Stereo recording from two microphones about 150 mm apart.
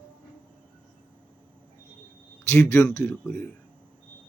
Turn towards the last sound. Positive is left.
turn(degrees=15)  # may be behind; listen again after turning